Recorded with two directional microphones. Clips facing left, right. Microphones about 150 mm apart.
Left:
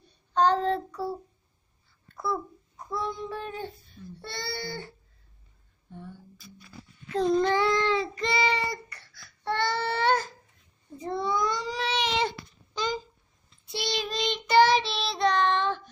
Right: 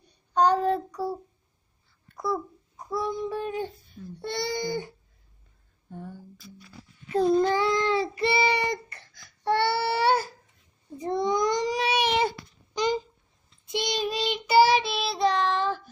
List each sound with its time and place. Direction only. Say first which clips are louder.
0.0 s child singing: right 1 dB; 10° right (ahead or behind)
2.1 s a child's voice: right 2 dB; 10° right (ahead or behind)
4.2 s child singing: right 7 dB; 15° right (ahead or behind)
5.9 s speech: right 3 dB; 45° right (ahead or behind)
7.1 s child singing: right 2 dB; 5° right (ahead or behind)
8.5 s a sound: right 3 dB; 20° right (ahead or behind)
11.0 s baby cry: right 3 dB; 15° right (ahead or behind)
13.7 s child singing: right 3 dB; 15° right (ahead or behind)